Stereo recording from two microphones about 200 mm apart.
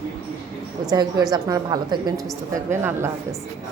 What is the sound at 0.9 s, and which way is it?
A woman's voice, 20° right (ahead or behind).